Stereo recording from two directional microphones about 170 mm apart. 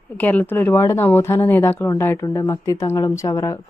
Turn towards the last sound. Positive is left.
turn(degrees=20)  # may be behind; listen again after turning